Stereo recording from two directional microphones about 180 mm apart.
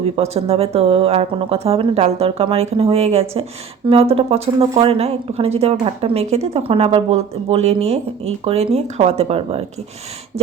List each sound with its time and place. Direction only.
0.0 s speech: 35° right (ahead or behind)